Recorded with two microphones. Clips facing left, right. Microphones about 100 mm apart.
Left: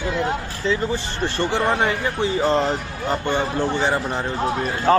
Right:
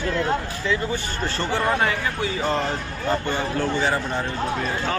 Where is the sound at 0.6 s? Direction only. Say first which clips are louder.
Left 7 dB; 30° left (ahead or behind).